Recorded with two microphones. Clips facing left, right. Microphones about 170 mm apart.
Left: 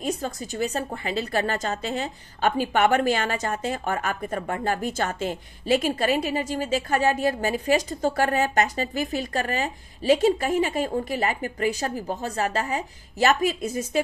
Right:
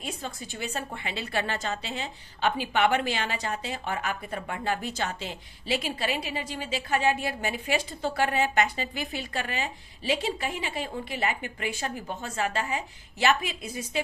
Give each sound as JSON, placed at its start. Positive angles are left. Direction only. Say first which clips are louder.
{"t": 0.0, "sound": "a woman's voice", "louder": "left 8 dB", "side_deg": 40}